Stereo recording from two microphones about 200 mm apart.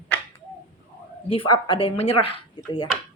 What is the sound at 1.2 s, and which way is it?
Speech, 25° left (ahead or behind).